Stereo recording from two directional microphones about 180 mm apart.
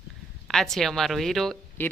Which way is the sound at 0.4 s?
Centre (ahead or behind).